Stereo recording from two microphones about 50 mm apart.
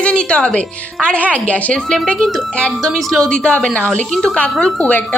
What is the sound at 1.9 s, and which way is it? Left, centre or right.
A woman's voice, centre.